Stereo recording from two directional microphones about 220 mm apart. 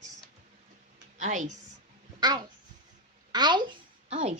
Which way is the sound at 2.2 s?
20° right (ahead or behind).